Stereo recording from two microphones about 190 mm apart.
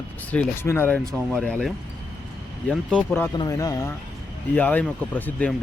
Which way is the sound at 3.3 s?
20° left (ahead or behind).